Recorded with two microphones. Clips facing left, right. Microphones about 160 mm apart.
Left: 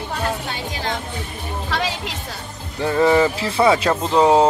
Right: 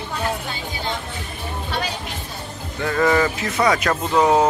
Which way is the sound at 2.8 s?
25° left (ahead or behind).